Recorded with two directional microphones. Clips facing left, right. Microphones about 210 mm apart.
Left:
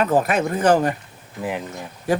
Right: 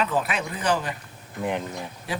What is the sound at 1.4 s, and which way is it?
Speech, 5° left (ahead or behind).